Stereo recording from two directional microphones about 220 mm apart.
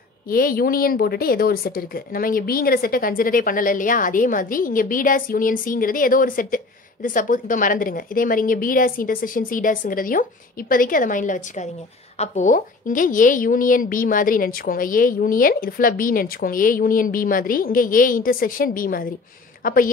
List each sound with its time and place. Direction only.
0.3 s a woman's voice: 40° left (ahead or behind)